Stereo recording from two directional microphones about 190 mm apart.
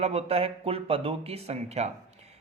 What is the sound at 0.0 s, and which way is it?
Speech, 35° right (ahead or behind).